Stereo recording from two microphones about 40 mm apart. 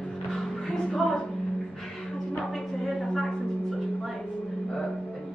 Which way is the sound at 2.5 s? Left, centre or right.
Centre.